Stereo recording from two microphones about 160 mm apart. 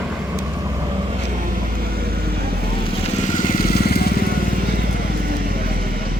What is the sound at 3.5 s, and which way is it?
Motorcycle, 70° left (ahead or behind).